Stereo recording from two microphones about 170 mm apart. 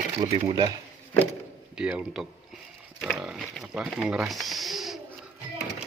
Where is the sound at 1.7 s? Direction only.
5° right (ahead or behind).